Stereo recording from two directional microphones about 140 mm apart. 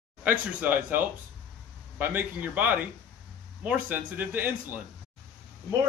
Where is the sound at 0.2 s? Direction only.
10° right (ahead or behind).